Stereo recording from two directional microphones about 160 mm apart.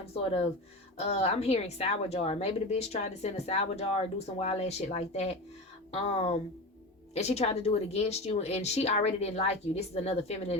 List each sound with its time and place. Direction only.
0.0 s a woman's voice: 40° left (ahead or behind)